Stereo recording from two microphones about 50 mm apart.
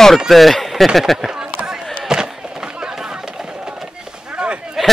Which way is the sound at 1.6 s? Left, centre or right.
Centre.